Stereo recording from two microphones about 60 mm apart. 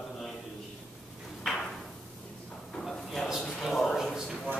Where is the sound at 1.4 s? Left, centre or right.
Centre.